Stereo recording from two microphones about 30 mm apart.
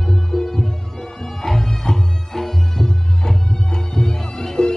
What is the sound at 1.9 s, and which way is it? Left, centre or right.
Music, centre.